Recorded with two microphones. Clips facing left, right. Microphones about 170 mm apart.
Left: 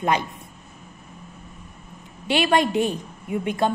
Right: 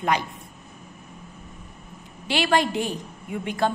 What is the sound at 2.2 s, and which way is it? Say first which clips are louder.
A woman's voice: left 2 dB; 20° left (ahead or behind).